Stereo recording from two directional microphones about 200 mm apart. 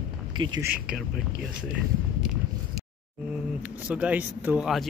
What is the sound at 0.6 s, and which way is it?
Speech, 5° right (ahead or behind).